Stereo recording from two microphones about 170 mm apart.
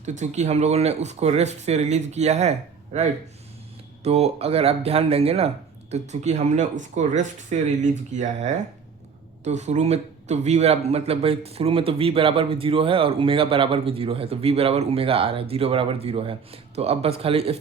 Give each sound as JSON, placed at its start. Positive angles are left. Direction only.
{"t": 0.0, "sound": "speech", "side_deg": -45}